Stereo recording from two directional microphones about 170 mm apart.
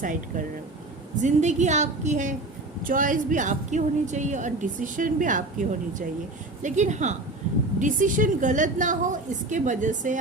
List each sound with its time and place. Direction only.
0.0 s a woman's voice: 50° right (ahead or behind)